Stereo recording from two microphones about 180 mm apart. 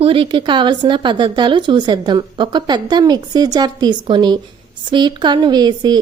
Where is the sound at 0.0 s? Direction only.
30° right (ahead or behind).